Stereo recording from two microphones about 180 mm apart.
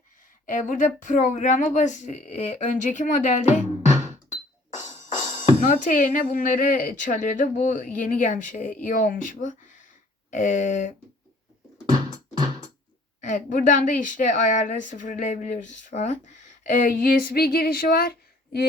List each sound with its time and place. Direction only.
0.4 s a woman's voice: 45° left (ahead or behind)
5.5 s a woman's voice: 45° left (ahead or behind)
13.2 s a woman's voice: 45° left (ahead or behind)